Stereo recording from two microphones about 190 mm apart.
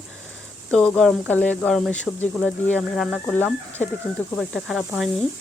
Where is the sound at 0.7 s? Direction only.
5° left (ahead or behind).